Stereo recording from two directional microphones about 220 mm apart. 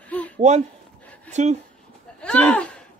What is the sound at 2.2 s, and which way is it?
Speech, 5° left (ahead or behind).